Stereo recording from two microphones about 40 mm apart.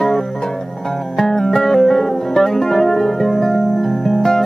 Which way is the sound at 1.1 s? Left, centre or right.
Centre.